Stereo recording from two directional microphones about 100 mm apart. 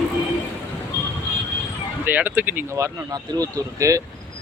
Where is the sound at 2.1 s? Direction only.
15° right (ahead or behind).